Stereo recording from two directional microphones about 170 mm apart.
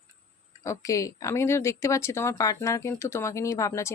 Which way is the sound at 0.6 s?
20° left (ahead or behind).